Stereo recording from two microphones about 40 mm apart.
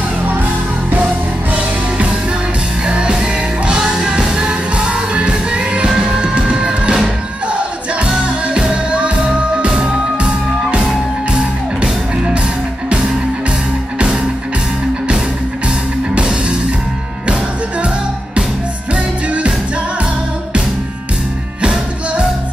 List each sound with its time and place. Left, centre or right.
1.5 s music: right
5.9 s music: centre
8.9 s music: right
13.9 s music: centre
16.2 s music: right
18.9 s music: right